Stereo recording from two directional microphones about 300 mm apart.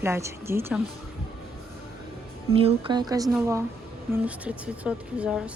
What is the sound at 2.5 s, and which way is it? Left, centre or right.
Speech, centre.